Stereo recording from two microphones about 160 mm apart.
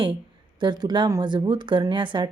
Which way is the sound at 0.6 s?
25° right (ahead or behind).